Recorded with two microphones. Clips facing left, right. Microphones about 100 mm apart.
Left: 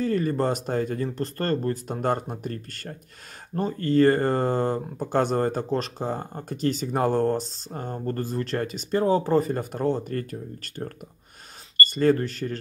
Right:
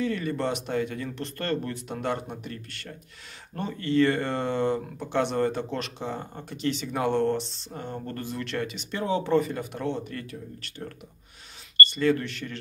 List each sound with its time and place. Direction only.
0.0 s speech: 40° left (ahead or behind)